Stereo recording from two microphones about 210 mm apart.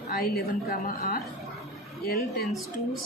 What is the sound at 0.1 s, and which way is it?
A woman's voice, 45° left (ahead or behind).